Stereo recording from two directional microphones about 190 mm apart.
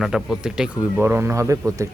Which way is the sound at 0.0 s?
Centre (ahead or behind).